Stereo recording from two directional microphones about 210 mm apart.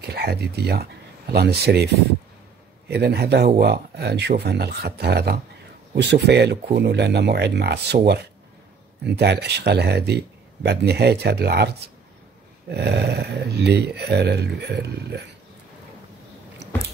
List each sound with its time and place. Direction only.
0.0 s speech: 50° right (ahead or behind)
2.9 s speech: 50° right (ahead or behind)